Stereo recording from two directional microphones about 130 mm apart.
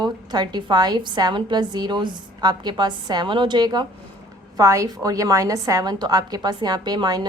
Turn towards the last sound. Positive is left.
turn(degrees=-30)  # may be behind; listen again after turning